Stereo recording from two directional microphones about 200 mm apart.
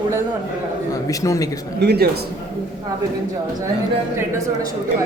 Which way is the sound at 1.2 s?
15° left (ahead or behind).